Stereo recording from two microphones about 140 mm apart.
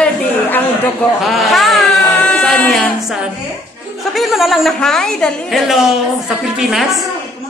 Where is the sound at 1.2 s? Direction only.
Centre (ahead or behind).